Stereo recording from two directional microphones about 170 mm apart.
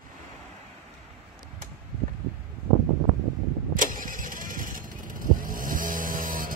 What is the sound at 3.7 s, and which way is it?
Vehicle, 50° right (ahead or behind).